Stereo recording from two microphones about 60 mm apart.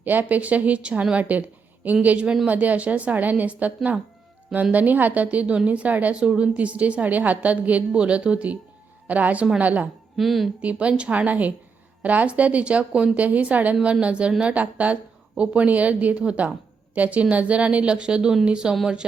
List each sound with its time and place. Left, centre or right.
0.0 s a woman's voice: right
10.2 s speech: centre
10.6 s a woman's voice: right